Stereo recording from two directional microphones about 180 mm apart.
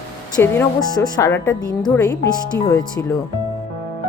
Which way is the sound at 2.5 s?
15° left (ahead or behind).